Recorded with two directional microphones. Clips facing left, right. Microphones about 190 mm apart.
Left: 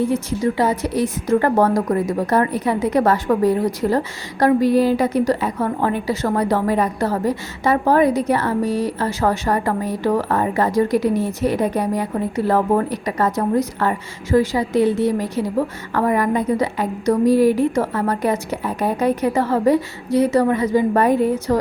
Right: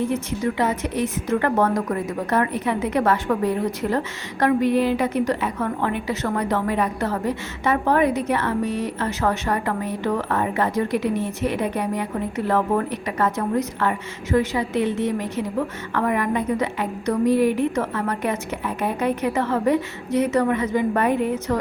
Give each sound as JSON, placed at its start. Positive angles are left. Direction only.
{"t": 0.1, "sound": "a woman's voice", "side_deg": 35}